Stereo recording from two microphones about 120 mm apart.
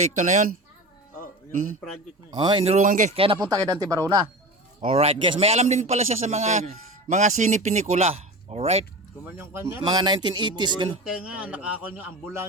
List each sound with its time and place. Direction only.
0.2 s speech: 90° right
2.3 s speech: 40° right (ahead or behind)
2.6 s speech: 80° right
3.4 s speech: 35° right (ahead or behind)
4.9 s a man's voice: 55° right (ahead or behind)
7.1 s speech: 85° right; by 8.8 s 60° right (ahead or behind)
9.2 s speech: 20° right (ahead or behind)
9.8 s speech: 35° right (ahead or behind)
11.0 s a man's voice: 10° right (ahead or behind)